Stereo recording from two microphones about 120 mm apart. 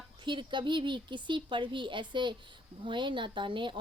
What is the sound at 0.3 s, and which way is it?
Speech, 40° right (ahead or behind).